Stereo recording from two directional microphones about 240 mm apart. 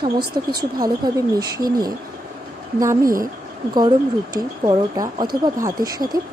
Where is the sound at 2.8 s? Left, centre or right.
Centre.